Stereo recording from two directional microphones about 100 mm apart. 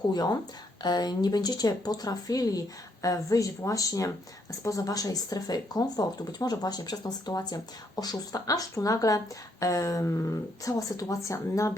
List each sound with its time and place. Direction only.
0.8 s speech: 45° left (ahead or behind)